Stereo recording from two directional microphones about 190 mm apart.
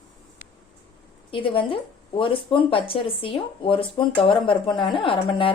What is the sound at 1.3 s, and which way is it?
Speech, 25° left (ahead or behind).